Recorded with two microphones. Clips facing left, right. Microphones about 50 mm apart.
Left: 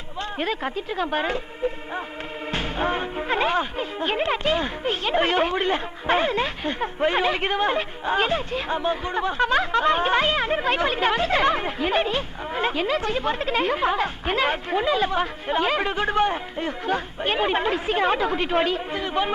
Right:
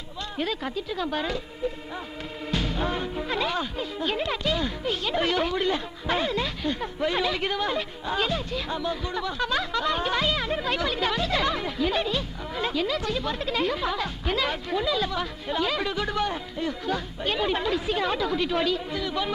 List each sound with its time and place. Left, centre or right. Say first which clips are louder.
0.2 s speech: left 3 dB; left